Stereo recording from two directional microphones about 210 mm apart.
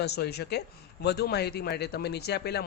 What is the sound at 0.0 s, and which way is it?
Speech, 50° left (ahead or behind).